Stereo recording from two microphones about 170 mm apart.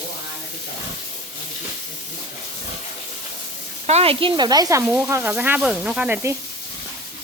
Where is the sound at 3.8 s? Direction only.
35° right (ahead or behind); by 6.3 s 10° right (ahead or behind).